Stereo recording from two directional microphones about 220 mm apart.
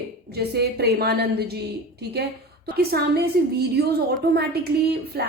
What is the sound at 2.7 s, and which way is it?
A woman's voice, 45° right (ahead or behind).